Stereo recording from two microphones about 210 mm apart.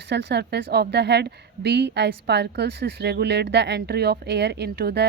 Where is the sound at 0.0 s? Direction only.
55° right (ahead or behind).